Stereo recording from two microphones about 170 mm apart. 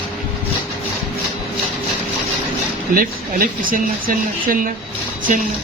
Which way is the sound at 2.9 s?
55° right (ahead or behind).